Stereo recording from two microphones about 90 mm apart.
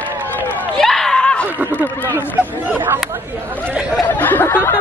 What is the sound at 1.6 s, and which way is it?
Speech, 20° right (ahead or behind).